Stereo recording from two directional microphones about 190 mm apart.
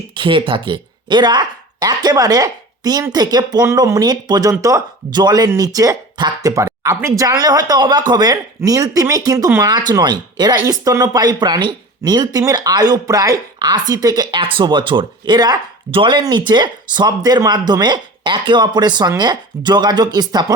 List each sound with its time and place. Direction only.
0.1 s speech: 25° right (ahead or behind)